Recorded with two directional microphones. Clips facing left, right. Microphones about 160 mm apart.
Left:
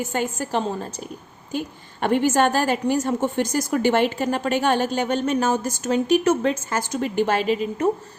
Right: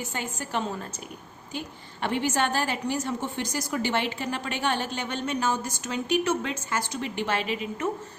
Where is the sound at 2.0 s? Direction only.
50° left (ahead or behind).